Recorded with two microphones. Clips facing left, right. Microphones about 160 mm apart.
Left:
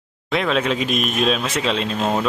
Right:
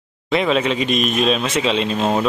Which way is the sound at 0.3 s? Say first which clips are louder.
Right 2 dB; centre (ahead or behind).